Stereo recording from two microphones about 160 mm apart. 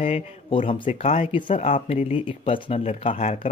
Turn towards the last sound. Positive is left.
turn(degrees=40)  # may be behind; listen again after turning